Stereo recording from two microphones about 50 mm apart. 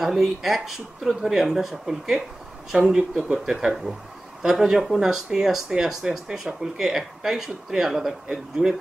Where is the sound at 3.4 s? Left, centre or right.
Centre.